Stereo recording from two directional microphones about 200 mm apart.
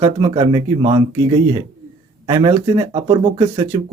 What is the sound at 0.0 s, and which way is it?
Speech, 20° right (ahead or behind).